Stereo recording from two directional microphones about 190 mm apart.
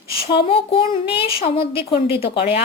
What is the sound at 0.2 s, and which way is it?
A woman's voice, 30° left (ahead or behind).